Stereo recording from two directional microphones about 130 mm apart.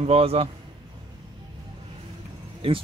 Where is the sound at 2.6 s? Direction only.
45° right (ahead or behind).